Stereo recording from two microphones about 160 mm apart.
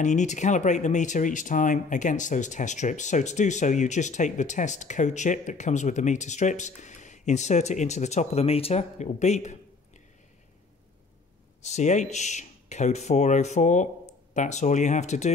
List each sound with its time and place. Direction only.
0.0 s speech: 50° left (ahead or behind)
11.6 s speech: 45° left (ahead or behind)